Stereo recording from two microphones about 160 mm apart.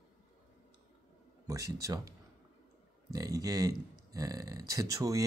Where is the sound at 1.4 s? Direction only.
20° right (ahead or behind).